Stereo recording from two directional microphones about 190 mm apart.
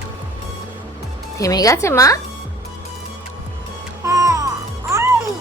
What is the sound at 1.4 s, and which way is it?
Speech, 20° left (ahead or behind).